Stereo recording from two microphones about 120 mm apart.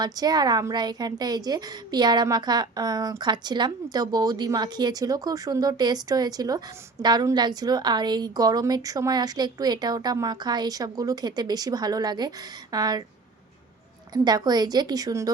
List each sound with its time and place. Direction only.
0.0 s a woman's voice: 35° right (ahead or behind)
14.1 s a woman's voice: 35° right (ahead or behind)